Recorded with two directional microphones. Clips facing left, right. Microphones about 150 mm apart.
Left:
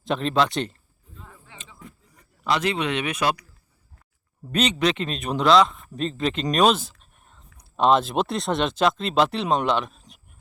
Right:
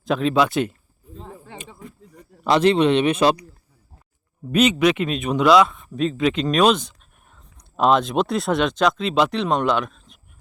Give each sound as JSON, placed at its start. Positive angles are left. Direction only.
{"t": 0.0, "sound": "a man's voice", "side_deg": 0}
{"t": 1.1, "sound": "a sound", "side_deg": -30}
{"t": 2.4, "sound": "a man's voice", "side_deg": -35}
{"t": 4.5, "sound": "a man's voice", "side_deg": -10}